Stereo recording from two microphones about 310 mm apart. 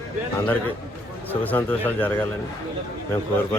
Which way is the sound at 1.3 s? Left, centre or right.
Centre.